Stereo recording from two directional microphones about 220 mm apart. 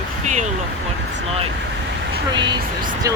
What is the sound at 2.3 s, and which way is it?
Speech, 20° right (ahead or behind).